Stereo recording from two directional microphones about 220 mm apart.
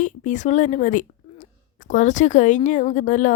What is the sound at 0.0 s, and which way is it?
Speech, 35° left (ahead or behind).